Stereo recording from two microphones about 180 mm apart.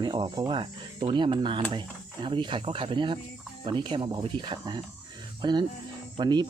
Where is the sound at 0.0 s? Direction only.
25° right (ahead or behind).